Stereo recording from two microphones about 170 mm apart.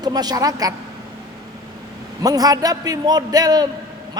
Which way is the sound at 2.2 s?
20° right (ahead or behind).